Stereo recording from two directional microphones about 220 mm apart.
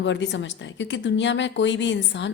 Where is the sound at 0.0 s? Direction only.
55° left (ahead or behind).